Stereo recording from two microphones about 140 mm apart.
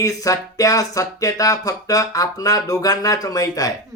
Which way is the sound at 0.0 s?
25° left (ahead or behind).